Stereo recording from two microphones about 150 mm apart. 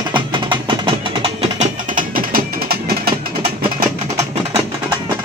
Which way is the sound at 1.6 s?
65° right (ahead or behind).